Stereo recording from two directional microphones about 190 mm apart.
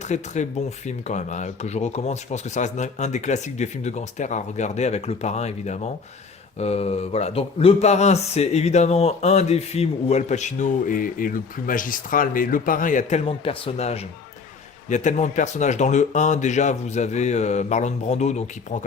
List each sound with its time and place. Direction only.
0.0 s speech: 40° left (ahead or behind)